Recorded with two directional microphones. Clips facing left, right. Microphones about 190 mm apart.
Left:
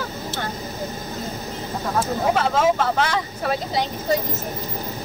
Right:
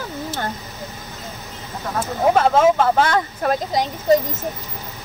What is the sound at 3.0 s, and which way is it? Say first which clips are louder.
Speech: right 4 dB; 50° right (ahead or behind).